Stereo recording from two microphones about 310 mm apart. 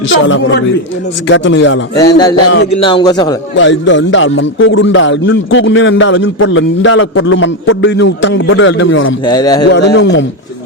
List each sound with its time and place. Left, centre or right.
0.1 s speech: left
2.0 s a man's voice: centre
3.5 s speech: left
9.2 s a man's voice: centre
9.6 s speech: left